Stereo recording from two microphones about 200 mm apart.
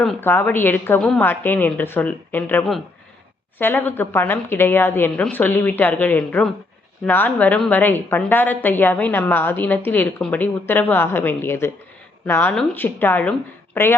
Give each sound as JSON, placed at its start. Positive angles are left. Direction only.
{"t": 0.0, "sound": "a woman's voice", "side_deg": 5}